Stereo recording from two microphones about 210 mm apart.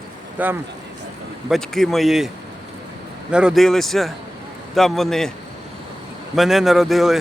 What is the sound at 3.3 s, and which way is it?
Speech, centre (ahead or behind).